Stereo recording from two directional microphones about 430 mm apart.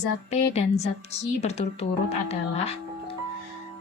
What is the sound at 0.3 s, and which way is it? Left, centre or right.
Speech, centre.